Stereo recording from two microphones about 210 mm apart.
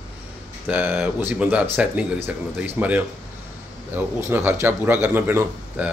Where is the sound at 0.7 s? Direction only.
10° right (ahead or behind).